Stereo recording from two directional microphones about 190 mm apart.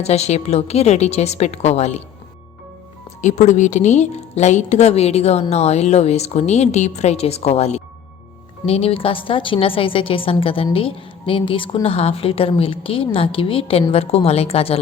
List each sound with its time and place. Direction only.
0.0 s a woman's voice: 35° left (ahead or behind)
3.2 s a woman's voice: 40° left (ahead or behind)